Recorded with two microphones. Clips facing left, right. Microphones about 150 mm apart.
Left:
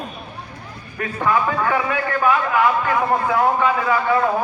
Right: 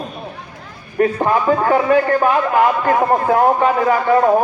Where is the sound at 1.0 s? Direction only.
35° right (ahead or behind).